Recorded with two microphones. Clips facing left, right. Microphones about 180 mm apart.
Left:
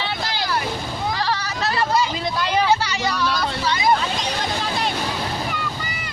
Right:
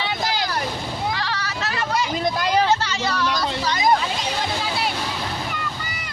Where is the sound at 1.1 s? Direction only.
35° left (ahead or behind).